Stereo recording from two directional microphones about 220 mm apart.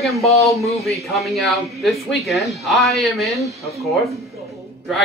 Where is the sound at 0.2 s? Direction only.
30° left (ahead or behind).